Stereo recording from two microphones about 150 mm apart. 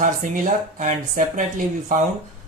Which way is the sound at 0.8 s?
55° right (ahead or behind).